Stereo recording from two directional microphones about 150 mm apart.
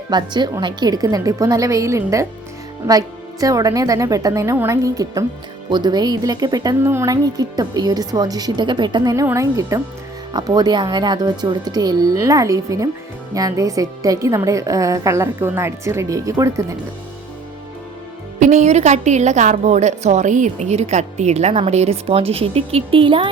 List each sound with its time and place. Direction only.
0.1 s speech: 30° right (ahead or behind)
3.4 s speech: 25° right (ahead or behind)
18.3 s a woman's voice: 55° right (ahead or behind); by 23.3 s 35° right (ahead or behind)